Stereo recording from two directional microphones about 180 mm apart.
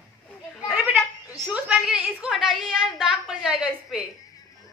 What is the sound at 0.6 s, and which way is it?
Goat, centre (ahead or behind).